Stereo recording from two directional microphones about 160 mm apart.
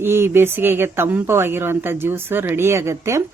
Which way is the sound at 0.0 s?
15° right (ahead or behind).